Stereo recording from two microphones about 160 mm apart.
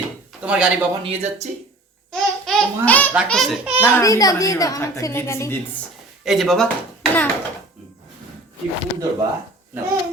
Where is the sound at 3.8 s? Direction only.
15° left (ahead or behind).